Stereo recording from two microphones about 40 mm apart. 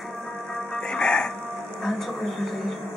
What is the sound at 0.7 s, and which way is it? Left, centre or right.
Music, centre.